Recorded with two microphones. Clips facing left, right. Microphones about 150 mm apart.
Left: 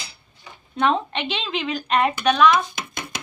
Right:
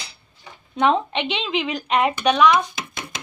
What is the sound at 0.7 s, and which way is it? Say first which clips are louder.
A woman's voice: right 2 dB; 20° right (ahead or behind).